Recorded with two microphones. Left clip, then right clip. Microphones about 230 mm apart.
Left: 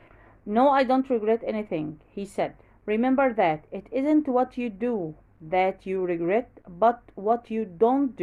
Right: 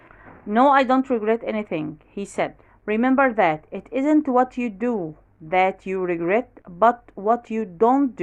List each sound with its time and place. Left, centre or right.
0.4 s a woman's voice: centre